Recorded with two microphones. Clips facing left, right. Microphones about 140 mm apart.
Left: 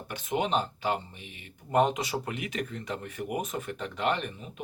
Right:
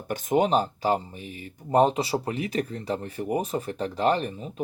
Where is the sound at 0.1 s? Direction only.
45° right (ahead or behind).